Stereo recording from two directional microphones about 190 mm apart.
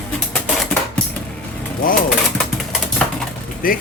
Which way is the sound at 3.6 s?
50° left (ahead or behind).